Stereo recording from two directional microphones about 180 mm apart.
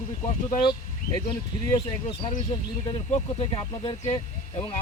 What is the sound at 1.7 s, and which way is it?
Speech, 25° left (ahead or behind).